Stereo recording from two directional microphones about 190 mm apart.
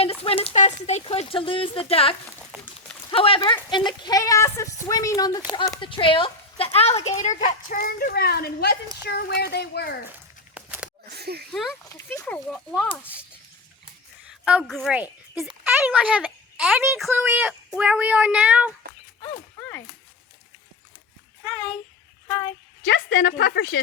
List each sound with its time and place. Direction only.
0.0 s speech: 30° left (ahead or behind)
2.5 s speech: 5° right (ahead or behind)
3.1 s speech: 30° left (ahead or behind)
7.4 s speech: 45° left (ahead or behind)
10.5 s a sound: 5° right (ahead or behind)
11.2 s speech: 55° right (ahead or behind)
11.9 s speech: 15° left (ahead or behind)
14.3 s a woman's voice: 5° right (ahead or behind)
17.1 s a sound: 10° right (ahead or behind)
19.5 s a sound: 10° left (ahead or behind)
22.3 s speech: 15° left (ahead or behind)
23.2 s a woman's voice: 55° left (ahead or behind)